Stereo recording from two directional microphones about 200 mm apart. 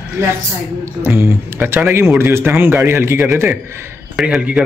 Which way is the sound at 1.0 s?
10° right (ahead or behind).